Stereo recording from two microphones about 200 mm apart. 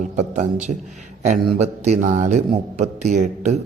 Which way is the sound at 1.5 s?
35° right (ahead or behind).